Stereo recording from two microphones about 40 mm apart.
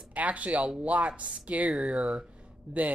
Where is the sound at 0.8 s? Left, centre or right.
Right.